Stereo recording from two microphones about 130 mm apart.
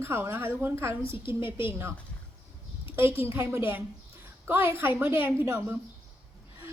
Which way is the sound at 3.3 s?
20° right (ahead or behind).